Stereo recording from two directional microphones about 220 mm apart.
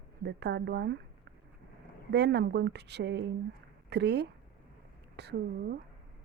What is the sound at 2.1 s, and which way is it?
Speech, 50° right (ahead or behind).